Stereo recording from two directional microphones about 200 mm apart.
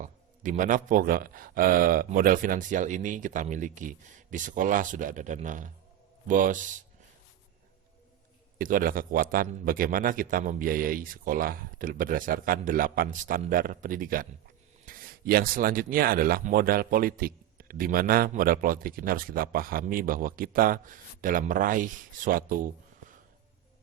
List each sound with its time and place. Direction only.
0.0 s speech: 40° right (ahead or behind)
8.5 s speech: 45° right (ahead or behind)